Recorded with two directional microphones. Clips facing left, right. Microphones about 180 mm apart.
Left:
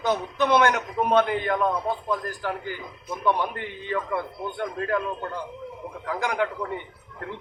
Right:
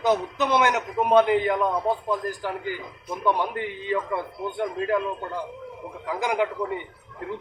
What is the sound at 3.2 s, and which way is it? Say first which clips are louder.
Speech: right 1 dB; 15° right (ahead or behind).